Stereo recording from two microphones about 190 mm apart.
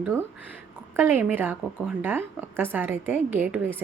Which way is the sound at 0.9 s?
10° right (ahead or behind).